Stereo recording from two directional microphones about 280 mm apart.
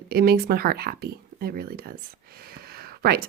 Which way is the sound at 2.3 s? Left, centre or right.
Right.